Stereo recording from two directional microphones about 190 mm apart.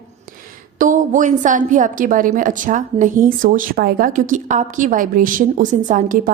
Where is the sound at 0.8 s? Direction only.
45° right (ahead or behind).